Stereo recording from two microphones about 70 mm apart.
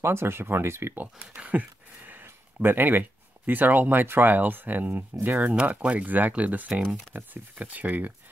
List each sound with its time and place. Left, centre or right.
0.0 s speech: right
1.1 s speech: centre